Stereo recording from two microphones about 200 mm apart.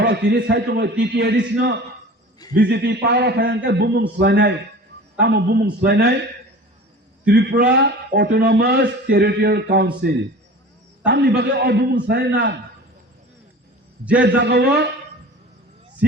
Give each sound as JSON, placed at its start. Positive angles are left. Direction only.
{"t": 0.0, "sound": "a man's voice", "side_deg": -55}
{"t": 7.3, "sound": "a man's voice", "side_deg": -60}
{"t": 14.2, "sound": "a man's voice", "side_deg": -60}